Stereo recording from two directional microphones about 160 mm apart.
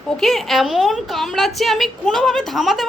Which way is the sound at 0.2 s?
Centre (ahead or behind).